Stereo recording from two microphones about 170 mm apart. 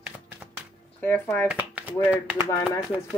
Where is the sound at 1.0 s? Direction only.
15° left (ahead or behind).